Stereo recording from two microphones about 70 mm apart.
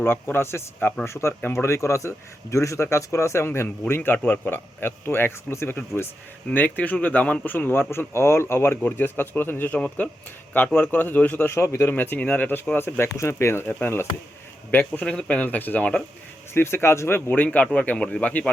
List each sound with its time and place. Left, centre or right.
0.0 s speech: left
6.5 s speech: left
7.5 s speech: left
9.7 s speech: centre
11.6 s speech: left
11.9 s speech: left
14.7 s speech: left
15.0 s speech: centre
16.6 s speech: left; by 18.5 s centre